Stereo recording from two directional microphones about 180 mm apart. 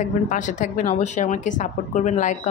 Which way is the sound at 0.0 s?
45° left (ahead or behind).